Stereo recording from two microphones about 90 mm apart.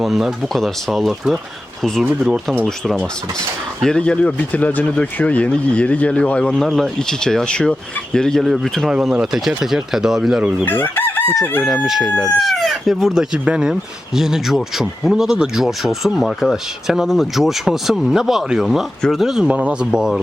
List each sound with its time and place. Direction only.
0.0 s speech: 5° right (ahead or behind)
10.7 s chicken: 25° left (ahead or behind)
11.9 s speech: 5° right (ahead or behind)